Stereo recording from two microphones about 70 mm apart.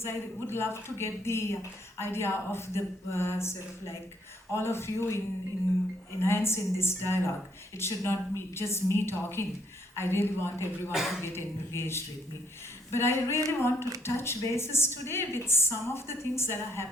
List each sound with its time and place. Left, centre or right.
0.0 s a woman's voice: left